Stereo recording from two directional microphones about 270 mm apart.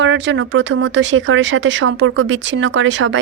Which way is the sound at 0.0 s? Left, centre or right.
Right.